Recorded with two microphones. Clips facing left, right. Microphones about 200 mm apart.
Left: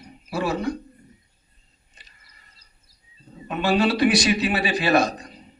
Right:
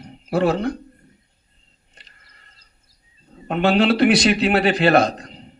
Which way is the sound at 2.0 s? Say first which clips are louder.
Right 3 dB; 70° right (ahead or behind).